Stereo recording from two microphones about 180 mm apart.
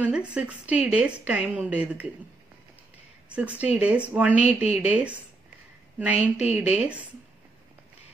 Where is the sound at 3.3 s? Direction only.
5° right (ahead or behind).